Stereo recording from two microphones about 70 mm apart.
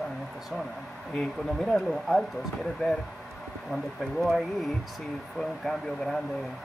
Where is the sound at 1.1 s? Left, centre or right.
Centre.